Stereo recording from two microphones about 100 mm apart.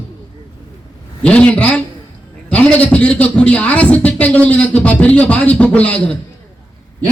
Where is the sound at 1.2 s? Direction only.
10° left (ahead or behind).